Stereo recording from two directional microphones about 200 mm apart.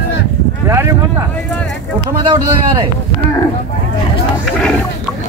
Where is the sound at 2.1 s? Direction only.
25° right (ahead or behind).